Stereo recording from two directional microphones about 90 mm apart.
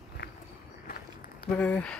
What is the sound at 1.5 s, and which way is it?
Speech, 15° left (ahead or behind).